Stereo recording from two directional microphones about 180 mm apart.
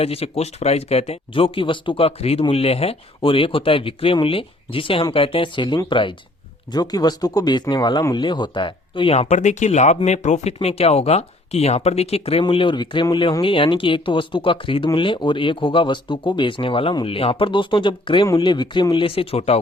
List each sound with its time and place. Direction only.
0.0 s speech: 35° left (ahead or behind)